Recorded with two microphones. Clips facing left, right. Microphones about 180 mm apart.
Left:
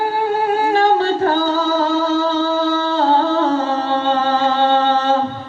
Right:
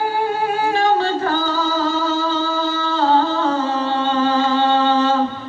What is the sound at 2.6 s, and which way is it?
Music, 60° left (ahead or behind).